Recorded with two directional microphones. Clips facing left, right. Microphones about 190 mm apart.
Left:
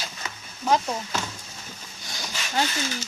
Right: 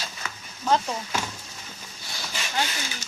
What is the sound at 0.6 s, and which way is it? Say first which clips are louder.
Speech: left 1 dB; 15° left (ahead or behind).